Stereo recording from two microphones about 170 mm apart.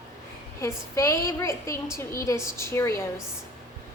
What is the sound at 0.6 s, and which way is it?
A woman's voice, 15° left (ahead or behind).